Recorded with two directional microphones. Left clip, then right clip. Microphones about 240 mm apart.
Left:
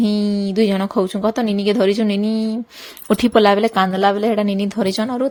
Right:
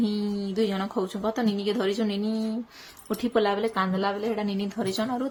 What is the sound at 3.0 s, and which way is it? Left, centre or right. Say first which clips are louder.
A woman's voice: left 11 dB; left.